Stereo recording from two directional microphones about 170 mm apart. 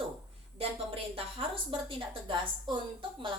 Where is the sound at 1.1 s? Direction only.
30° right (ahead or behind).